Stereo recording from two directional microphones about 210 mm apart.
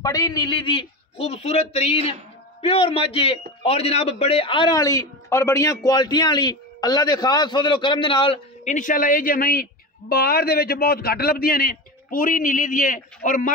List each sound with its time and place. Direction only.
0.0 s a man's voice: 15° left (ahead or behind)
8.7 s speech: 40° left (ahead or behind)